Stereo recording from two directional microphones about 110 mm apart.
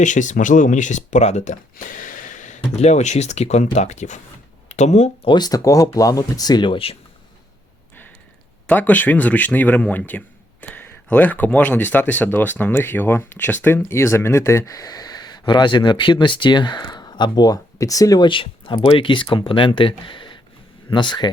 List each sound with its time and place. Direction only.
0.9 s speech: 90° left
2.7 s speech: 85° left
5.2 s speech: 40° left (ahead or behind)
8.6 s speech: 15° left (ahead or behind); by 18.3 s 35° left (ahead or behind)
18.3 s speech: 50° left (ahead or behind)